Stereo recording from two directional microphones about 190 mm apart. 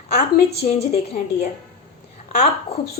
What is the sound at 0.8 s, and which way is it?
Speech, 35° left (ahead or behind).